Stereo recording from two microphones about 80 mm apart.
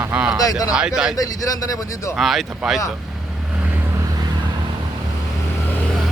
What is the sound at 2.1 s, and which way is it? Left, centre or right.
Speech, centre.